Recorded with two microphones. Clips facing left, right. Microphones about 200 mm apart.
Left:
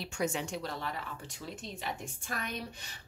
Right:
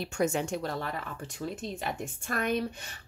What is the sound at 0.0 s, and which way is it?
Speech, 50° right (ahead or behind).